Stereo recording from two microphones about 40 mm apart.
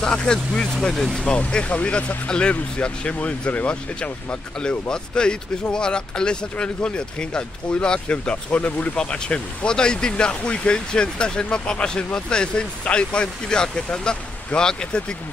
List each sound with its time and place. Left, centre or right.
0.0 s speech: left
1.9 s speech: left
4.6 s speech: left
8.9 s speech: left